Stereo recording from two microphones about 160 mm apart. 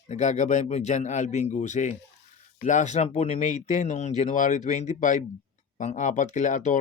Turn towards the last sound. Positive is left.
turn(degrees=50)  # may be behind; listen again after turning